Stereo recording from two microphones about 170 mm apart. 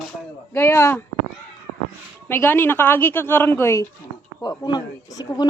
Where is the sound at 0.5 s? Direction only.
15° left (ahead or behind).